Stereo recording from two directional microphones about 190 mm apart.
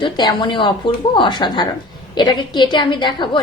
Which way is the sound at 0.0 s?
25° left (ahead or behind).